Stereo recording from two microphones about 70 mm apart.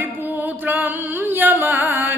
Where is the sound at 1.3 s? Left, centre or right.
Right.